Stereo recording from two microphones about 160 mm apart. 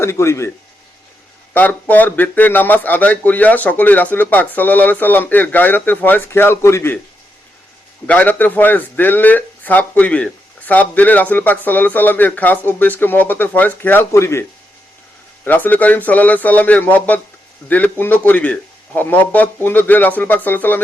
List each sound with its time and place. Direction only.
0.0 s a man's voice: 15° left (ahead or behind)
1.5 s a man's voice: 10° left (ahead or behind)
8.0 s a man's voice: 10° left (ahead or behind)
15.4 s a man's voice: 10° left (ahead or behind)